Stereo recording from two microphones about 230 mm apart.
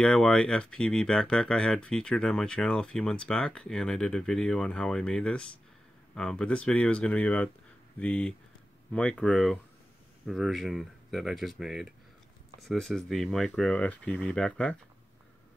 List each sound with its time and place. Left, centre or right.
0.0 s speech: centre